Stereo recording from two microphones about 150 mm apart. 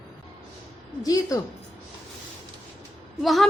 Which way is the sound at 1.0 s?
25° left (ahead or behind).